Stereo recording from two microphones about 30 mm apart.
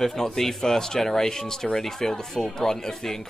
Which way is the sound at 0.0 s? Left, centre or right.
Centre.